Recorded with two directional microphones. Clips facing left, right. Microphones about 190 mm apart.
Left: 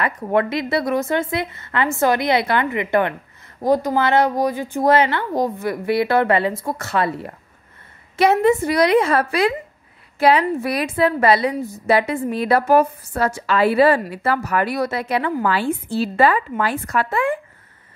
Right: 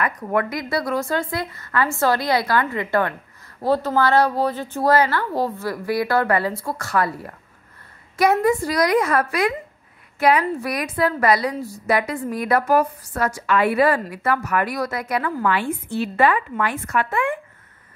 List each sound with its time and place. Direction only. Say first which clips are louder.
0.0 s a woman's voice: left 3 dB; 25° left (ahead or behind)